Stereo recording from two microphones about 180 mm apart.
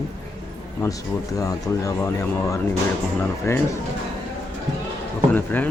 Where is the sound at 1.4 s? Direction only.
20° left (ahead or behind).